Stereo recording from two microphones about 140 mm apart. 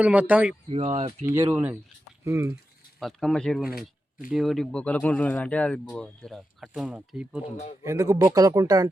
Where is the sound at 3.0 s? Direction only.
Centre (ahead or behind).